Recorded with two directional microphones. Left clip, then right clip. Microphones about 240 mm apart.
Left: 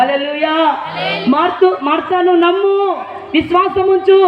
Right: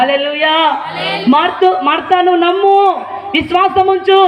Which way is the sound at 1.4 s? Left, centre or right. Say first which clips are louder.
Right 1 dB; centre.